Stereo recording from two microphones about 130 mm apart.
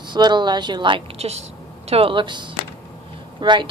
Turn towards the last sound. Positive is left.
turn(degrees=-35)  # may be behind; listen again after turning